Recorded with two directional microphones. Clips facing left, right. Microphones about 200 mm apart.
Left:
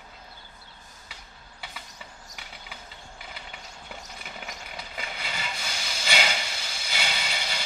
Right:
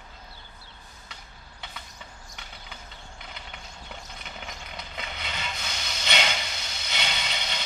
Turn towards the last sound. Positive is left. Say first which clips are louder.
# even
turn(degrees=5)  # may be behind; listen again after turning